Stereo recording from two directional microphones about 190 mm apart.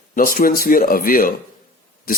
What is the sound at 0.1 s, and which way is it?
Speech, 45° left (ahead or behind).